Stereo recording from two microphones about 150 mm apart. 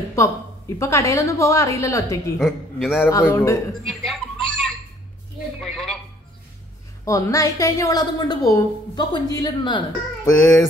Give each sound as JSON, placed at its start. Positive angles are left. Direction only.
{"t": 0.1, "sound": "a woman's voice", "side_deg": 20}
{"t": 2.3, "sound": "a woman's voice", "side_deg": 0}
{"t": 3.0, "sound": "a woman's voice", "side_deg": 20}
{"t": 3.9, "sound": "a sound", "side_deg": 5}
{"t": 7.1, "sound": "a woman's voice", "side_deg": 20}